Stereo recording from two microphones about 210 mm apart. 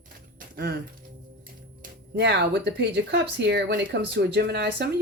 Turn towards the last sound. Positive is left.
turn(degrees=-50)  # may be behind; listen again after turning